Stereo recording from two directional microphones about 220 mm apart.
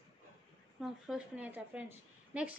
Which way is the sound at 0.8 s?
5° right (ahead or behind).